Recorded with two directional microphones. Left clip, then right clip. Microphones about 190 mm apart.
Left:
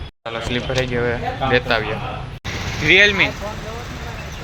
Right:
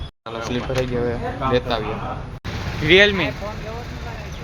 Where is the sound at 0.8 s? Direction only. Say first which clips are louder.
Left 3 dB; centre (ahead or behind).